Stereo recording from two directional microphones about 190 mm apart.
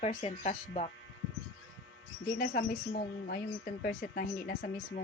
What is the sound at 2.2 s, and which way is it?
Speech, 55° left (ahead or behind).